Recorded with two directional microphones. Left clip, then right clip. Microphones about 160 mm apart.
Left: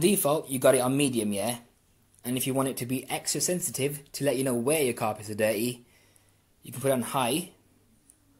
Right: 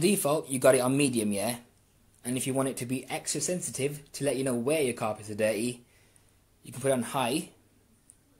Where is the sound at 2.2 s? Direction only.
15° left (ahead or behind).